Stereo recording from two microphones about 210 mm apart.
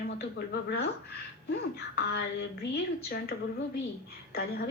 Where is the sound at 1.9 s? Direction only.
50° left (ahead or behind).